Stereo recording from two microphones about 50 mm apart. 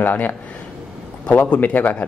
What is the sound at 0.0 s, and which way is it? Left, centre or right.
Speech, left.